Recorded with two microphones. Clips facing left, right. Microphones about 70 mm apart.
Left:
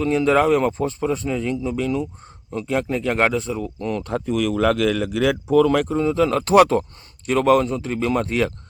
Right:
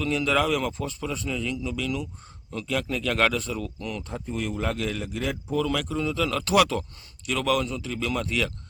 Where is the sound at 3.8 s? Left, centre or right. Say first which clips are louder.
Left 8 dB; left.